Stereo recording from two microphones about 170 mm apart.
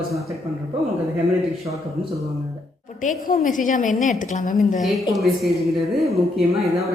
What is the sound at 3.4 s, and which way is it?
A woman's voice, 50° left (ahead or behind).